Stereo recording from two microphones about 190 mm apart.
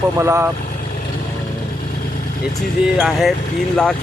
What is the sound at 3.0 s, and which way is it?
Speech, centre (ahead or behind).